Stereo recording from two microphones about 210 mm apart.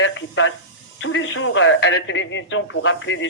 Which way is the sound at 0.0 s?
65° left (ahead or behind).